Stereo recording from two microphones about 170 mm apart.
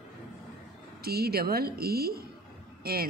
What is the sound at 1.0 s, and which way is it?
A woman's voice, 65° right (ahead or behind).